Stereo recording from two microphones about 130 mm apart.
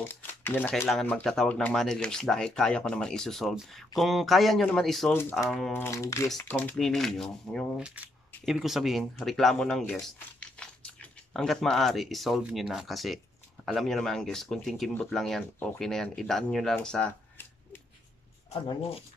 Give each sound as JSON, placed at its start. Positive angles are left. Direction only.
{"t": 0.1, "sound": "speech", "side_deg": 15}
{"t": 5.7, "sound": "speech", "side_deg": 20}
{"t": 6.3, "sound": "speech", "side_deg": 10}
{"t": 7.8, "sound": "coin", "side_deg": -10}
{"t": 8.5, "sound": "speech", "side_deg": 0}